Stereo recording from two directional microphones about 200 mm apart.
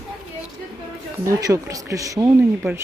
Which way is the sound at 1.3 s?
15° right (ahead or behind).